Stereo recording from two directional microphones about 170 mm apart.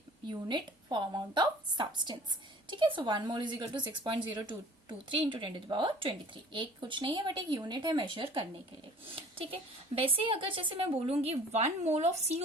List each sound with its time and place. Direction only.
0.3 s a woman's voice: 25° right (ahead or behind); by 12.4 s 40° right (ahead or behind)